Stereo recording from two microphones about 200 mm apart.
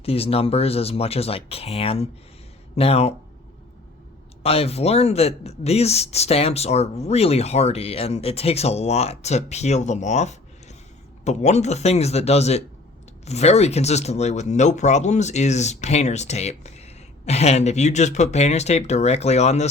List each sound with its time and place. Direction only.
0.0 s speech: 30° left (ahead or behind)
4.4 s speech: 30° left (ahead or behind)